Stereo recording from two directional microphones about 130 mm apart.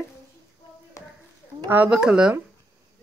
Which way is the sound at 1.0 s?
25° left (ahead or behind).